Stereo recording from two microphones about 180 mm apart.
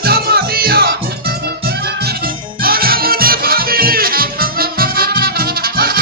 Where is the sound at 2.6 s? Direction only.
55° right (ahead or behind).